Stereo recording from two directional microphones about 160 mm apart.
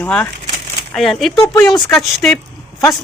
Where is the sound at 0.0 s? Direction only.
10° left (ahead or behind).